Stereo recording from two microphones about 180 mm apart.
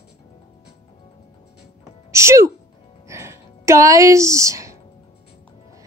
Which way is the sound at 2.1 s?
15° right (ahead or behind).